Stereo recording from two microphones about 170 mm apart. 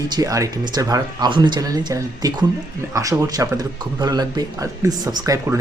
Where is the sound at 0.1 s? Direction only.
20° right (ahead or behind).